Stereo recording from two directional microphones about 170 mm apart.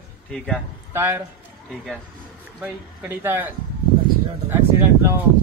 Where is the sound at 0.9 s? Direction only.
15° right (ahead or behind).